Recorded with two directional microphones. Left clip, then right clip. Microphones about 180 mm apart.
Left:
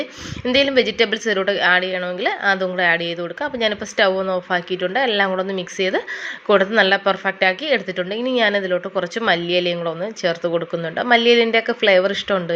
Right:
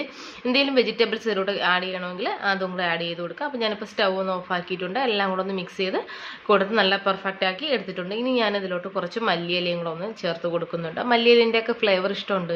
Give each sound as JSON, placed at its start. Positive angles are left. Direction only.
{"t": 0.4, "sound": "a woman's voice", "side_deg": 25}